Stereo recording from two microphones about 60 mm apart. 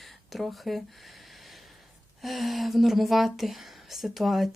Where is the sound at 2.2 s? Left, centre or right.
Centre.